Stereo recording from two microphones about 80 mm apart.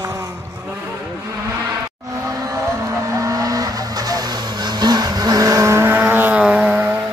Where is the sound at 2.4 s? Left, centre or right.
Right.